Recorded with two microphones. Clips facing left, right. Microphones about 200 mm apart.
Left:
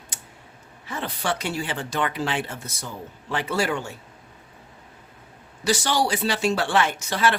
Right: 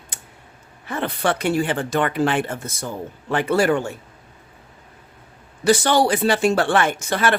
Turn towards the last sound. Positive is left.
turn(degrees=-55)  # may be behind; listen again after turning